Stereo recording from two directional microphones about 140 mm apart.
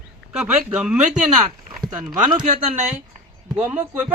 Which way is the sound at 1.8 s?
30° right (ahead or behind).